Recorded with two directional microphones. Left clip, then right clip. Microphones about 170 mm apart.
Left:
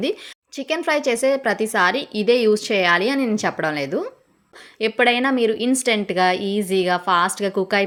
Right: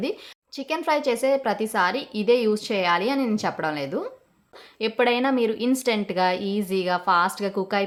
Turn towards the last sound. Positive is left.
turn(degrees=20)  # may be behind; listen again after turning